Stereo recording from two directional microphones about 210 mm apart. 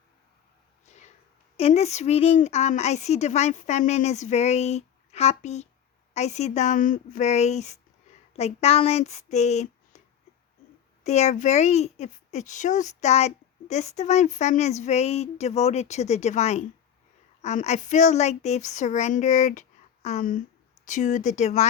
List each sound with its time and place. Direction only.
0.9 s a sound: 35° left (ahead or behind)
1.5 s a child's voice: 30° left (ahead or behind)
11.0 s a child's voice: 35° left (ahead or behind)